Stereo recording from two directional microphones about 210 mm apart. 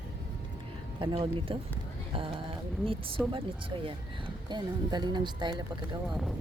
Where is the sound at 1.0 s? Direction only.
25° right (ahead or behind).